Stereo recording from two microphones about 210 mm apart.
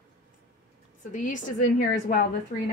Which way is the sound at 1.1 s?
40° left (ahead or behind).